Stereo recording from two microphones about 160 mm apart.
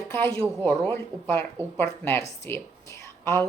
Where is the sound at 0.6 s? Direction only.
15° left (ahead or behind).